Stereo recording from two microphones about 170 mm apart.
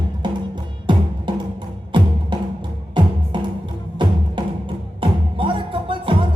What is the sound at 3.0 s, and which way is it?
Music, 25° right (ahead or behind).